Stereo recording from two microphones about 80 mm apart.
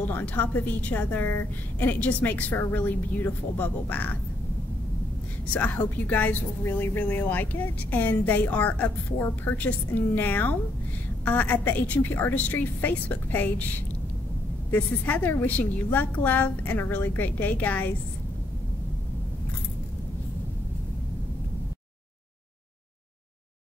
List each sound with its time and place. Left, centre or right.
0.0 s a woman's voice: centre
5.5 s a woman's voice: left